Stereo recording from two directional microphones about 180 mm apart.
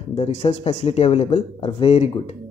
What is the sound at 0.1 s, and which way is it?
Speech, 35° left (ahead or behind).